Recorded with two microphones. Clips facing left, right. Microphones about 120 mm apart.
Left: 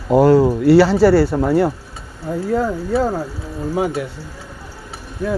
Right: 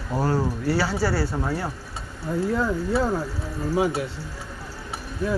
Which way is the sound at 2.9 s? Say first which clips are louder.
Left 6 dB; 60° left (ahead or behind).